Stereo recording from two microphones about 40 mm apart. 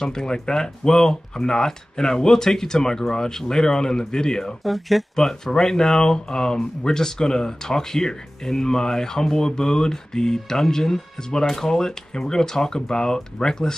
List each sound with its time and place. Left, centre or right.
0.0 s speech: centre
4.6 s speech: centre
5.1 s speech: centre